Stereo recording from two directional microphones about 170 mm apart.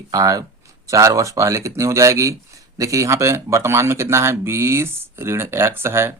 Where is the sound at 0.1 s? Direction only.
20° right (ahead or behind).